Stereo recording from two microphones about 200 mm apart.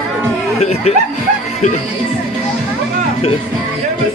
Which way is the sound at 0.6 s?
30° left (ahead or behind).